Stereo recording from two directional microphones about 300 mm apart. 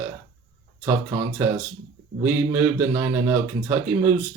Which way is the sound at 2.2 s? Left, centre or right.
Centre.